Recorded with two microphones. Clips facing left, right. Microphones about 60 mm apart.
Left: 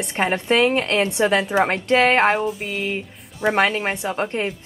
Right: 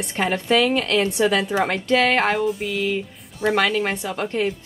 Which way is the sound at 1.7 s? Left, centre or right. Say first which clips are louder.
Left 1 dB; left.